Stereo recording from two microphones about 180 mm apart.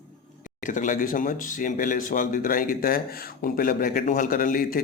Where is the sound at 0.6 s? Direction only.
45° left (ahead or behind).